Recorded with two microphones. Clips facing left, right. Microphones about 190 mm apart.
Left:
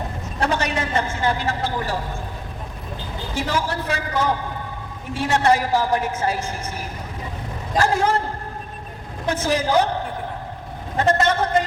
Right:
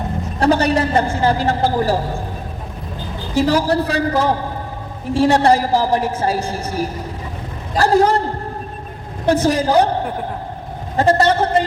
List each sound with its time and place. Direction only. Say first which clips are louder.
0.3 s a woman's voice: right 8 dB; 35° right (ahead or behind)
3.3 s a woman's voice: right 9 dB; 35° right (ahead or behind)
9.2 s a woman's voice: right 6 dB; 35° right (ahead or behind)